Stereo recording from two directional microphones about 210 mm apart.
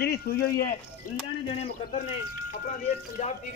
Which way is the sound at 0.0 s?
50° left (ahead or behind).